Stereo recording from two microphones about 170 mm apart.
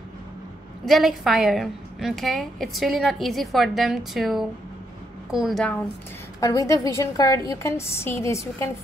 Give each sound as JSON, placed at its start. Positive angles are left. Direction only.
{"t": 0.8, "sound": "a woman's voice", "side_deg": 0}
{"t": 6.4, "sound": "a woman's voice", "side_deg": 20}